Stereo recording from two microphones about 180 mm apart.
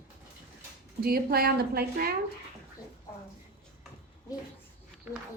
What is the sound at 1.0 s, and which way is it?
A woman's voice, 55° right (ahead or behind).